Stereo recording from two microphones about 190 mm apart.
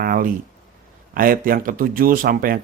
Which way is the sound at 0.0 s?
50° right (ahead or behind).